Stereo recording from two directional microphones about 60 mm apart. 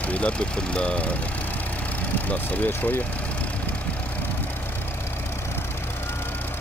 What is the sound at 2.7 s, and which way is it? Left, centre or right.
Speech, left.